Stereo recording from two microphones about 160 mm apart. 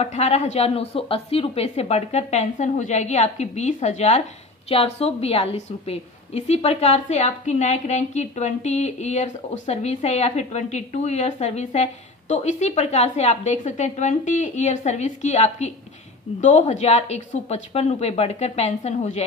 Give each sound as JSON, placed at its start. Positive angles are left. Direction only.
{"t": 0.0, "sound": "a woman's voice", "side_deg": 40}